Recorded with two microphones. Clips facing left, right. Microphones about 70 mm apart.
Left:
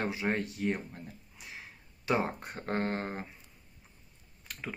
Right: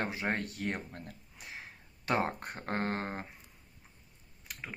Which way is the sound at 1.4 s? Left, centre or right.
Right.